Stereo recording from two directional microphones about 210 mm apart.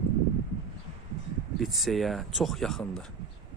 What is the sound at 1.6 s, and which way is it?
Speech, centre (ahead or behind).